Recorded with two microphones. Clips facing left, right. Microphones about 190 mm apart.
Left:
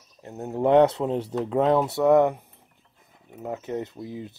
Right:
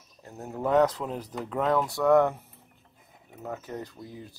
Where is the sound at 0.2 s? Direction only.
20° left (ahead or behind).